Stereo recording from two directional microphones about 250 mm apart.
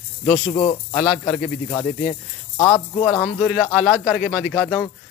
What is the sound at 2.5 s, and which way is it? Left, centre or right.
Speech, centre.